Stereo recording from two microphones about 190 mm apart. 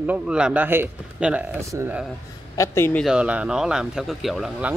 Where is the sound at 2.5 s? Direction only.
15° left (ahead or behind).